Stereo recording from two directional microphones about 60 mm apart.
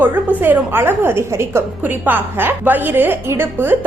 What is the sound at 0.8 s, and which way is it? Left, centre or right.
Speech, right.